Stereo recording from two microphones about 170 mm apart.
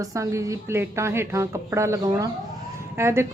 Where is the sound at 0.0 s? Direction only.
20° right (ahead or behind).